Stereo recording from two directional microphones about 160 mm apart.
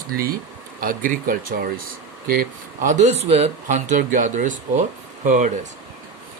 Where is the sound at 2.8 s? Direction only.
50° right (ahead or behind).